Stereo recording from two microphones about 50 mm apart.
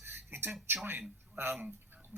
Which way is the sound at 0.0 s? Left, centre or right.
Right.